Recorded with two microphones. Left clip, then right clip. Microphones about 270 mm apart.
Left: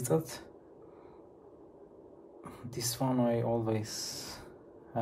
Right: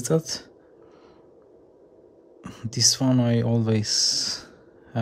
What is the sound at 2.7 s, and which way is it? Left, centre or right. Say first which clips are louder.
A man's voice: right 13 dB; right.